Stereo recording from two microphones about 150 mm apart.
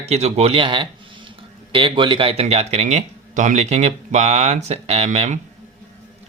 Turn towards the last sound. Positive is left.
turn(degrees=-45)  # may be behind; listen again after turning